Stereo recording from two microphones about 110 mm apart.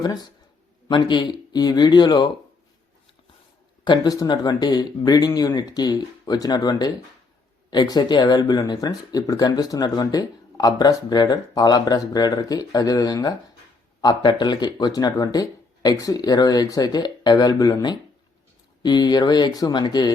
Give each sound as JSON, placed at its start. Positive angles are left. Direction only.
{"t": 0.0, "sound": "speech", "side_deg": 35}
{"t": 3.8, "sound": "speech", "side_deg": 40}